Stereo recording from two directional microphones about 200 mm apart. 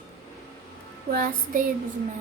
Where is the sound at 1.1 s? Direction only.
45° right (ahead or behind).